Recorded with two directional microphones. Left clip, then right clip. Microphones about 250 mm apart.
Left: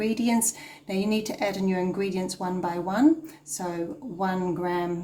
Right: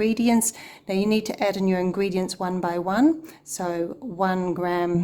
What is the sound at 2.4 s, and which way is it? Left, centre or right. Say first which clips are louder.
A woman's voice: right 2 dB; right.